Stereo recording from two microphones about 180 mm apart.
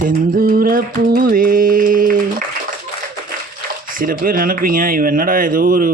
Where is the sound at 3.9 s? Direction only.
50° right (ahead or behind).